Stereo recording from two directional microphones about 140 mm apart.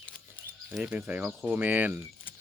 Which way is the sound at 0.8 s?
10° right (ahead or behind).